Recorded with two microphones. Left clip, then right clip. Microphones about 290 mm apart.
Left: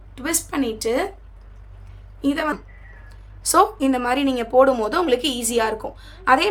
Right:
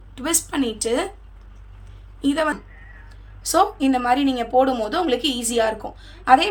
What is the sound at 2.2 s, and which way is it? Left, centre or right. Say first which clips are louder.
A woman's voice: right 1 dB; centre.